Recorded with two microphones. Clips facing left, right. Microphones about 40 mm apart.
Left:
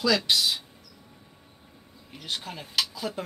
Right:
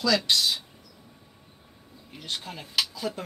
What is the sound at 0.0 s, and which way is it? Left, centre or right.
Speech, centre.